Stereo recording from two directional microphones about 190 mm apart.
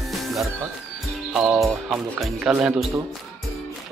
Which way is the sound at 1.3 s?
Centre (ahead or behind).